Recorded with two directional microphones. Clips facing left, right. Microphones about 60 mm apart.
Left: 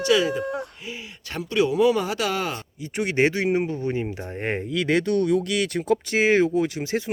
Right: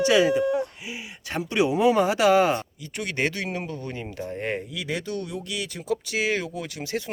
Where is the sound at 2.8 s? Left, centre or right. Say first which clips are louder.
Left 6 dB; left.